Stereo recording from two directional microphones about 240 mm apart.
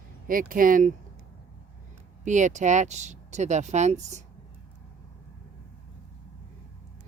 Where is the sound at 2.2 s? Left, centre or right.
Right.